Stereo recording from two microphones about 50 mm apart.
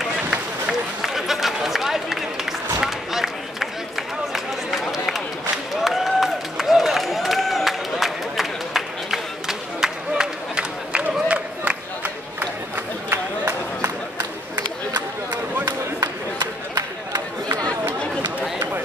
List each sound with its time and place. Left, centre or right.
0.7 s run: centre
2.8 s a sound: centre
4.3 s run: centre
5.8 s a sound: centre
11.2 s crowd: right
12.0 s run: right